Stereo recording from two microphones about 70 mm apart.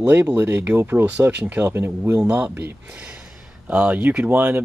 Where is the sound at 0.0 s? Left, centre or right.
Right.